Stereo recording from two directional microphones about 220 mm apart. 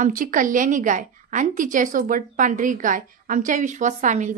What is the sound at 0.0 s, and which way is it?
A woman's voice, 35° right (ahead or behind).